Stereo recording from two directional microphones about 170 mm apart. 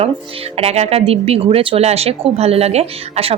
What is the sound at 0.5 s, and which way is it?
Speech, 35° right (ahead or behind).